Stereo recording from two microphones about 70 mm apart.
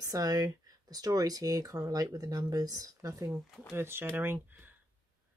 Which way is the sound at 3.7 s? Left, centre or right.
Right.